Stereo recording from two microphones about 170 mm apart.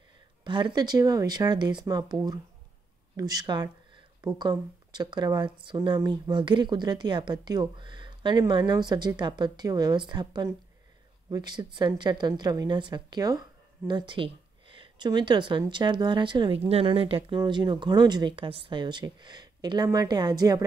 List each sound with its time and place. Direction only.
0.4 s speech: 30° right (ahead or behind)
3.2 s speech: 20° right (ahead or behind)